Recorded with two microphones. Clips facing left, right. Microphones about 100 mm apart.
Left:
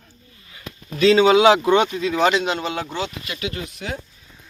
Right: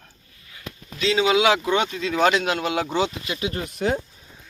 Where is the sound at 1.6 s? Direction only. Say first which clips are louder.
Left 5 dB; 20° left (ahead or behind).